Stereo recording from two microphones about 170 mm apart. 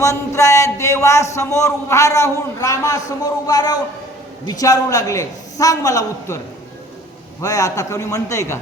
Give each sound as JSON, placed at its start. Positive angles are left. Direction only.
{"t": 0.0, "sound": "a man's voice", "side_deg": 15}
{"t": 7.4, "sound": "a man's voice", "side_deg": 20}